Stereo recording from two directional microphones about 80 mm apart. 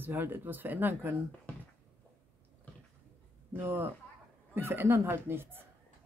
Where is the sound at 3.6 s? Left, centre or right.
Right.